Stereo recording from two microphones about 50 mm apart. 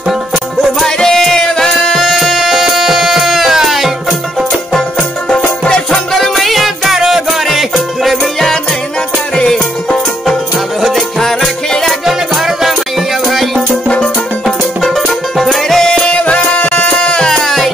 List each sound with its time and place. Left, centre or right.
0.6 s music: centre
6.1 s music: centre
9.3 s music: centre
10.8 s music: centre
13.8 s music: left
14.4 s music: centre
15.8 s music: centre; by 16.8 s left
17.0 s music: centre
17.3 s music: centre